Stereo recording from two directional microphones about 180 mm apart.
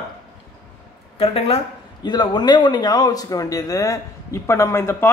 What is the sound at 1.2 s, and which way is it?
Speech, 35° left (ahead or behind).